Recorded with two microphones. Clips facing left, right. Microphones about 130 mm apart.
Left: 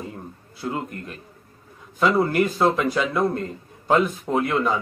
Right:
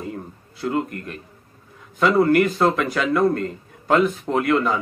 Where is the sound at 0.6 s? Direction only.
20° left (ahead or behind).